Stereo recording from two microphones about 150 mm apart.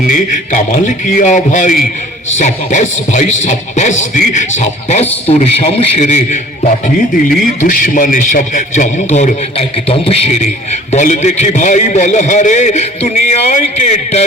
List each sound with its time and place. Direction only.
0.0 s a man's voice: 55° left (ahead or behind)